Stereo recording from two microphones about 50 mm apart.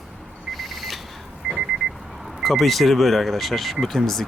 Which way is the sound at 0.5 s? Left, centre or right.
Centre.